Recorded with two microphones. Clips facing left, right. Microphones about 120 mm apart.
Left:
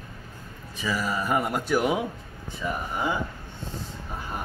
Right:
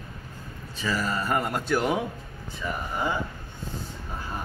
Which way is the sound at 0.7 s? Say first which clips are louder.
Even; 10° left (ahead or behind).